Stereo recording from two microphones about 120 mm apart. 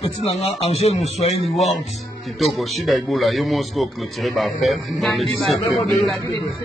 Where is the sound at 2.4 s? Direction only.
Centre (ahead or behind).